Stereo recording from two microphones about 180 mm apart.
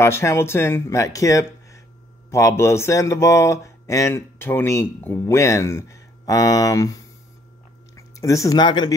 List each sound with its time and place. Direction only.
0.0 s speech: 15° left (ahead or behind)